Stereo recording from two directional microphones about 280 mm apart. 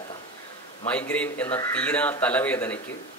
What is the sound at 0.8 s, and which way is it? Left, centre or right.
Speech, centre.